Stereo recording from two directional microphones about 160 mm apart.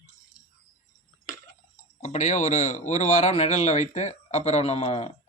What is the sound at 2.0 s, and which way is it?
A man's voice, 50° left (ahead or behind).